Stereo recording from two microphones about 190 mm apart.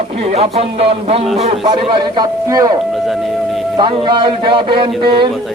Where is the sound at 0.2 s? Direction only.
35° right (ahead or behind).